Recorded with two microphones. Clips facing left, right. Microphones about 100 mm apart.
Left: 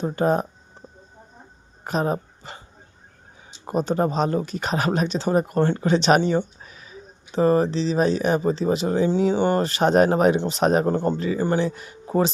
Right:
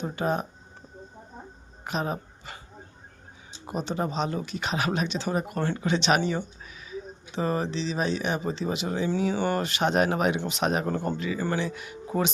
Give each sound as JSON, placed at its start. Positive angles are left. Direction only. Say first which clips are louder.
{"t": 0.0, "sound": "speech", "louder": "left 6 dB", "side_deg": 40}
{"t": 1.8, "sound": "speech", "louder": "left 6 dB", "side_deg": 40}
{"t": 3.7, "sound": "speech", "louder": "left 7 dB", "side_deg": 45}
{"t": 6.6, "sound": "a sound", "louder": "left 1 dB", "side_deg": 40}
{"t": 7.3, "sound": "speech", "louder": "left 9 dB", "side_deg": 40}
{"t": 10.9, "sound": "speech", "louder": "left 6 dB", "side_deg": 25}
{"t": 11.2, "sound": "speech", "louder": "left 6 dB", "side_deg": 35}